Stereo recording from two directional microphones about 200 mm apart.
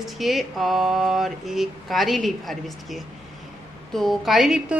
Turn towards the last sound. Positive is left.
turn(degrees=0)  # may be behind; listen again after turning